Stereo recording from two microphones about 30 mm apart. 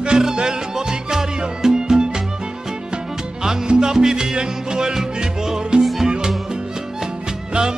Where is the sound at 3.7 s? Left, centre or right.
Right.